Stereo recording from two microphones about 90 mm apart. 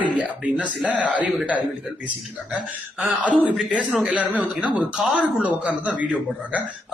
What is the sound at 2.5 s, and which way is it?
Speech, 15° right (ahead or behind).